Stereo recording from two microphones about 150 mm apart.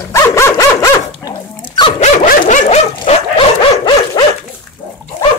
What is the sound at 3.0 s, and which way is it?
Dog, 35° left (ahead or behind).